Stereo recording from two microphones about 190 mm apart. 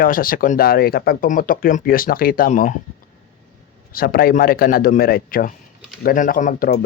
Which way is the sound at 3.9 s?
50° left (ahead or behind).